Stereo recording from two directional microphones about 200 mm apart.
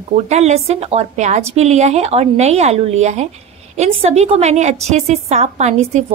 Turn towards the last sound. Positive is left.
turn(degrees=-35)  # may be behind; listen again after turning